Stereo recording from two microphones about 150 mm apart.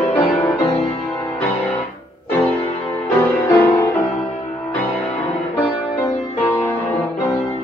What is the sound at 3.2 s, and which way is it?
Music, 15° left (ahead or behind).